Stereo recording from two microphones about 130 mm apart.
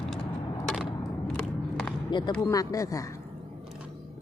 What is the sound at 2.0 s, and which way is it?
Speech, 35° left (ahead or behind).